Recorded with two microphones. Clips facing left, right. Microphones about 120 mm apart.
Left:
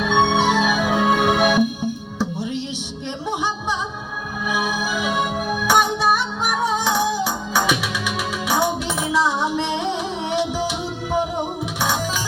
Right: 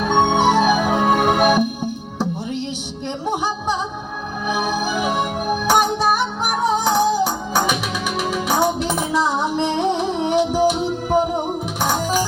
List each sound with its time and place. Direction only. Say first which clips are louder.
0.0 s music: right 2 dB; 45° right (ahead or behind)
4.4 s music: right 2 dB; 45° right (ahead or behind)
6.8 s music: right 4 dB; 45° right (ahead or behind)